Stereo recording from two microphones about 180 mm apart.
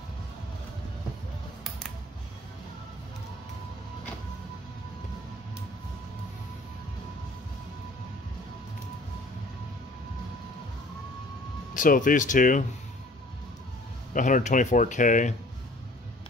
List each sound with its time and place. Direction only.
11.7 s speech: 50° left (ahead or behind)
14.1 s speech: 45° left (ahead or behind)